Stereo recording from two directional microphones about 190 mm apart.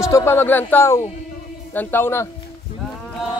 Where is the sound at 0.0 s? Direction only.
15° left (ahead or behind).